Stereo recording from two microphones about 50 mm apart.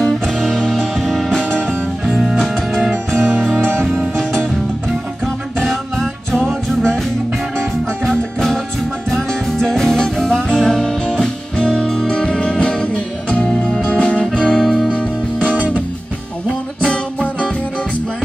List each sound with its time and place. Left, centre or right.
0.0 s music: centre
1.3 s music: centre
2.0 s music: centre
2.3 s music: centre
8.0 s music: centre
11.7 s music: centre
12.1 s music: centre
14.6 s music: centre
14.9 s music: left
15.5 s music: right
16.8 s music: left